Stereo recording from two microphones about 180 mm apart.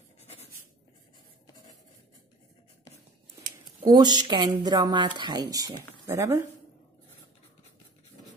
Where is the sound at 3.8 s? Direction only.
25° right (ahead or behind).